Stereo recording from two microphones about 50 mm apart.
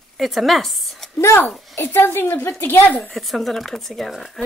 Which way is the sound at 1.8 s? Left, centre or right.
Left.